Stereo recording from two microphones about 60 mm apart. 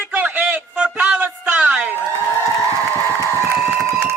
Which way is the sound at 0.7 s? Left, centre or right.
Right.